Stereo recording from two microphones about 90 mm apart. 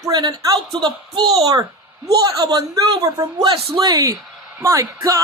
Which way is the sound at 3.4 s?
80° right.